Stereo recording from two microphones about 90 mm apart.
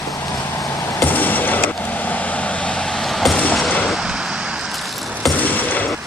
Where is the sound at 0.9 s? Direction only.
20° left (ahead or behind); by 5.3 s centre (ahead or behind).